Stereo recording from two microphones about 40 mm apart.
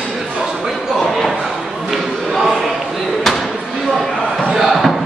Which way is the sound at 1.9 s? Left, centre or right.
Centre.